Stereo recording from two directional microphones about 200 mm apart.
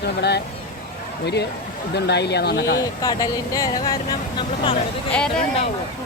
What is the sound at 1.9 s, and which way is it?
Speech, 55° left (ahead or behind).